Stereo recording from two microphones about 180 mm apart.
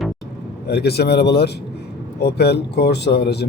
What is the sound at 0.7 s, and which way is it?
Speech, 65° left (ahead or behind).